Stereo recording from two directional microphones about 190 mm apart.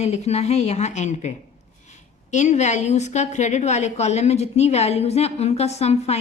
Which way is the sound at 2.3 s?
40° left (ahead or behind).